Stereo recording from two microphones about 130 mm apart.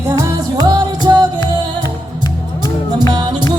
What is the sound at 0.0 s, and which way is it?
Music, 20° right (ahead or behind).